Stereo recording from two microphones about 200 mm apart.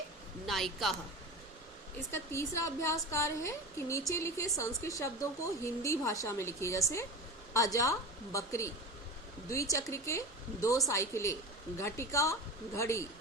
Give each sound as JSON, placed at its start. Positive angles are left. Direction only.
{"t": 0.4, "sound": "a woman's voice", "side_deg": 0}
{"t": 2.1, "sound": "a woman's voice", "side_deg": 15}